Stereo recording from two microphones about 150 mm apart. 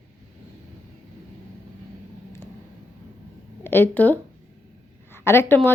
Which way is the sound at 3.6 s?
15° left (ahead or behind).